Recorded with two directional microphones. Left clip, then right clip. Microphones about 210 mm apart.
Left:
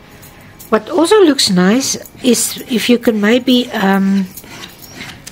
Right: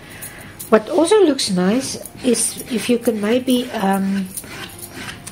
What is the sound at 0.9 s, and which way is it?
A woman's voice, 30° left (ahead or behind).